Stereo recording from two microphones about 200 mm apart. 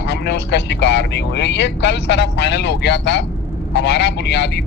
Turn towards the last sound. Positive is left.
turn(degrees=60)  # may be behind; listen again after turning